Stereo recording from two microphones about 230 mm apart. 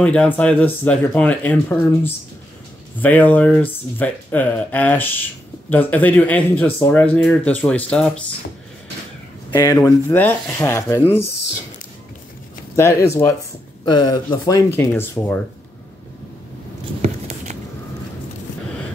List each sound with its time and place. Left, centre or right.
0.0 s speech: centre
9.6 s speech: centre
12.7 s speech: centre